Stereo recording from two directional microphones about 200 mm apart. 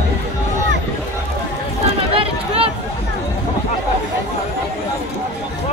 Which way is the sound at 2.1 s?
30° right (ahead or behind).